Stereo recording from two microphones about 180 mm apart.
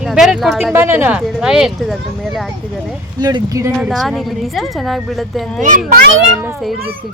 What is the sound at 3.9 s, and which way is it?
Speech, centre (ahead or behind).